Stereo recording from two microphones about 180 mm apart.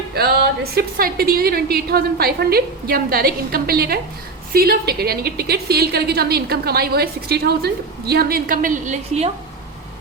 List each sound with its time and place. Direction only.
0.8 s a woman's voice: 55° right (ahead or behind); by 9.3 s 40° right (ahead or behind)